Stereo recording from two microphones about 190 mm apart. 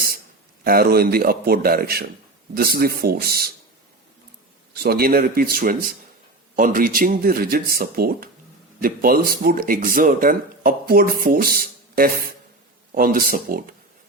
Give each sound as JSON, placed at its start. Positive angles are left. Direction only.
{"t": 0.6, "sound": "speech", "side_deg": -50}
{"t": 4.7, "sound": "speech", "side_deg": -55}